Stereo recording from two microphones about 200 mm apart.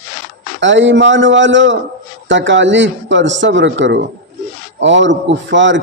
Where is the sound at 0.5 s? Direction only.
65° right (ahead or behind).